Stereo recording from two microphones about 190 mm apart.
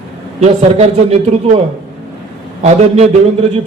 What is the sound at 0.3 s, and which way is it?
Speech, 35° right (ahead or behind).